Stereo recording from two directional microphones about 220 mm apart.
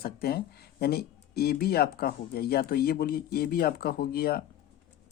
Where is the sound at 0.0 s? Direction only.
45° left (ahead or behind).